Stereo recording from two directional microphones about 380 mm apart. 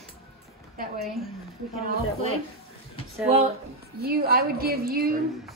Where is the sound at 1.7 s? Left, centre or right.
Centre.